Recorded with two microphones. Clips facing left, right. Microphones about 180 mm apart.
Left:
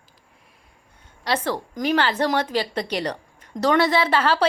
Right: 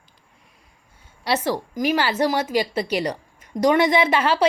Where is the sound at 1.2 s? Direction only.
10° right (ahead or behind).